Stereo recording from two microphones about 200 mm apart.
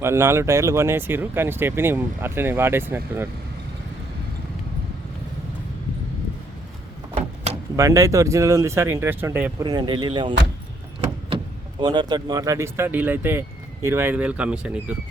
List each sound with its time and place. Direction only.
0.0 s speech: 15° right (ahead or behind)
7.8 s speech: 15° right (ahead or behind)
11.8 s speech: 20° right (ahead or behind); by 14.9 s 5° right (ahead or behind)